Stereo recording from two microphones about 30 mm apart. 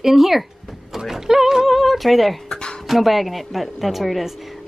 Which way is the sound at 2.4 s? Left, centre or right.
Left.